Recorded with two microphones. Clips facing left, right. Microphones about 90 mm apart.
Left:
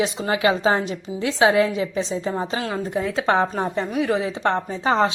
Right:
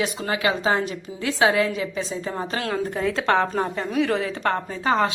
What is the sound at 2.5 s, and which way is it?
A woman's voice, 10° left (ahead or behind).